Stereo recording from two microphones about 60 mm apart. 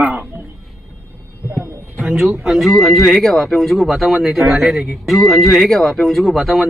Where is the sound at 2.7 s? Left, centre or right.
Centre.